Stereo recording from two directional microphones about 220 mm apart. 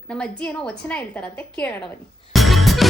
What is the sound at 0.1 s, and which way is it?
A woman's voice, 5° left (ahead or behind).